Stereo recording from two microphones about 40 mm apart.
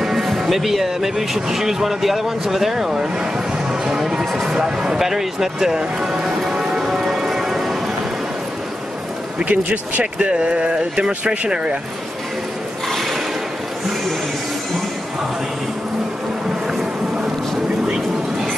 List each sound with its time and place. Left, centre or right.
0.0 s speech: centre
9.4 s speech: right
10.1 s speech: right
12.8 s a sound: centre